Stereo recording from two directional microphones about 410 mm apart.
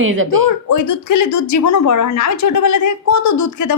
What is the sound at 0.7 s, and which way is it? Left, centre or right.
Speech, left.